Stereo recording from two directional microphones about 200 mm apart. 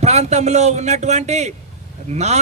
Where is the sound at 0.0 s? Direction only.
35° right (ahead or behind).